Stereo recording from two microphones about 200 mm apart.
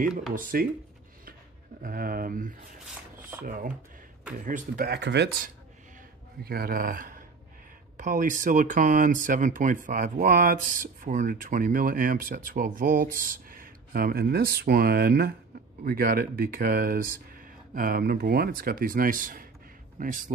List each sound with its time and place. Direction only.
0.3 s speech: 45° right (ahead or behind)
1.8 s speech: 45° right (ahead or behind)